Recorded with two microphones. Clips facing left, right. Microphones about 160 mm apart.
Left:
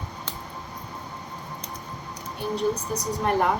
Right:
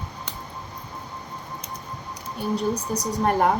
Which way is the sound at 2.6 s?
40° right (ahead or behind).